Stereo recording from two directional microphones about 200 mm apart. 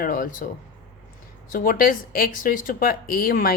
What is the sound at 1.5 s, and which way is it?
Speech, 45° left (ahead or behind).